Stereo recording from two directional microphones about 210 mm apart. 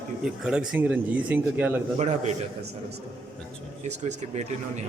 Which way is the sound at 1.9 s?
35° right (ahead or behind).